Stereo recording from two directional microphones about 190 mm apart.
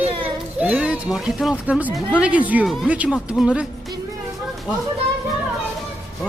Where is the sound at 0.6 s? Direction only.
5° right (ahead or behind).